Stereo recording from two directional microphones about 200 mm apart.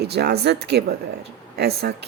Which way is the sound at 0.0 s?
55° right (ahead or behind).